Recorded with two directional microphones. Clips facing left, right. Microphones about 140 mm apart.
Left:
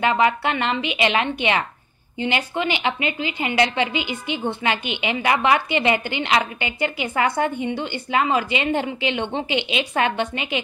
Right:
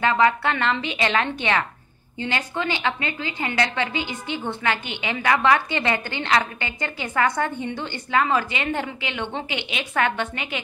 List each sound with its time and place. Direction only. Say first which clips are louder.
0.0 s a woman's voice: even; 20° left (ahead or behind)